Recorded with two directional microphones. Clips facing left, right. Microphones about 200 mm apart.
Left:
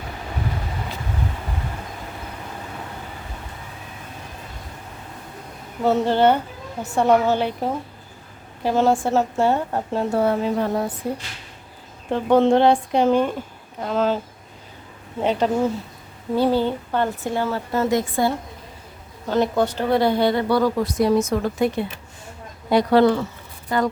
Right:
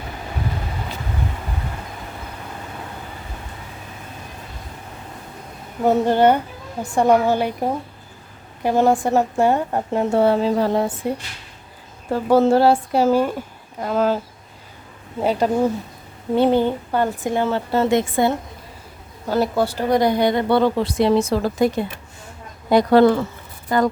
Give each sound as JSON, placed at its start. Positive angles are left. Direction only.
{"t": 5.8, "sound": "a woman's voice", "side_deg": -15}
{"t": 12.1, "sound": "a woman's voice", "side_deg": -5}
{"t": 15.2, "sound": "a woman's voice", "side_deg": -10}
{"t": 16.3, "sound": "speech", "side_deg": -20}
{"t": 19.3, "sound": "speech", "side_deg": -10}
{"t": 22.7, "sound": "speech", "side_deg": -45}